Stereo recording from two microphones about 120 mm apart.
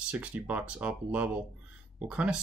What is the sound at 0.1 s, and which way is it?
Speech, 10° right (ahead or behind).